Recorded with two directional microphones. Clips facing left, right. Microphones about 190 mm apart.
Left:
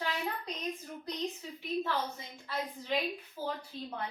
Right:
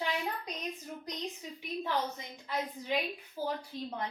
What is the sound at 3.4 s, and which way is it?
Speech, 40° right (ahead or behind).